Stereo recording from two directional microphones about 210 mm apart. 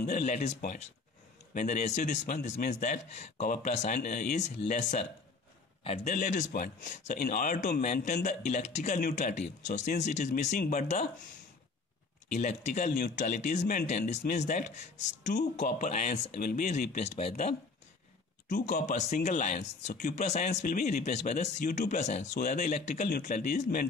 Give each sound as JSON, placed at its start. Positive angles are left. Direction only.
{"t": 0.0, "sound": "a man's voice", "side_deg": 35}
{"t": 12.3, "sound": "a man's voice", "side_deg": 35}
{"t": 23.0, "sound": "a man's voice", "side_deg": 45}